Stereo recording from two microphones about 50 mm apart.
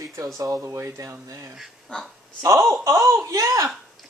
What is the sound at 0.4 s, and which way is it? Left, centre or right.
Speech, right.